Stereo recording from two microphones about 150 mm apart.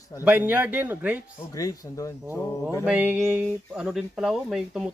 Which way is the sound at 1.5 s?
20° left (ahead or behind).